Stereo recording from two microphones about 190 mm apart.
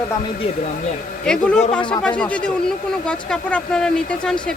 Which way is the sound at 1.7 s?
25° left (ahead or behind).